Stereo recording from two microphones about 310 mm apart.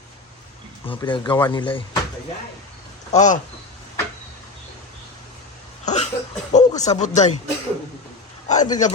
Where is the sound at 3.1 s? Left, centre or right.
Left.